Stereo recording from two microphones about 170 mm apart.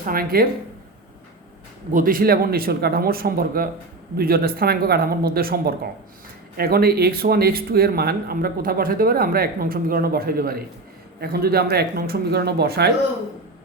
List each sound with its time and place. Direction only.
0.0 s speech: 60° right (ahead or behind)
1.9 s speech: 55° right (ahead or behind); by 12.9 s 70° right (ahead or behind)